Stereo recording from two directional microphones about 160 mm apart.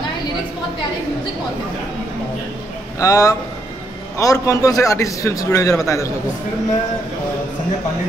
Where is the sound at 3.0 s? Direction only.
20° left (ahead or behind).